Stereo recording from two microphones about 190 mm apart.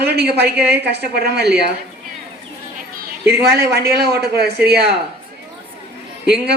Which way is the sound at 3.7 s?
55° right (ahead or behind).